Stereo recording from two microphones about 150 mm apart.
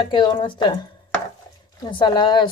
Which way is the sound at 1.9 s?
30° left (ahead or behind).